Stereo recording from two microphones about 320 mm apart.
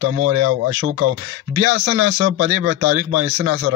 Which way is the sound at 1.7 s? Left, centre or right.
Right.